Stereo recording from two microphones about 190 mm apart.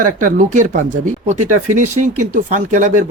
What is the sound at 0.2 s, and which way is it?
Speech, 45° right (ahead or behind).